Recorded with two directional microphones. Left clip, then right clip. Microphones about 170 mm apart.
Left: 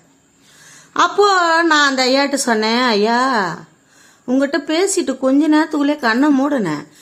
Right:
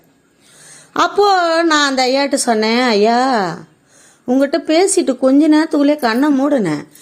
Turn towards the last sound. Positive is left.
turn(degrees=-20)  # may be behind; listen again after turning